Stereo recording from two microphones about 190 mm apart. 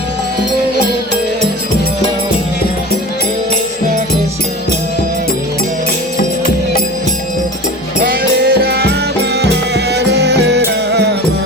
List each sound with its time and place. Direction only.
6.1 s music: 50° left (ahead or behind)
8.0 s music: 55° right (ahead or behind)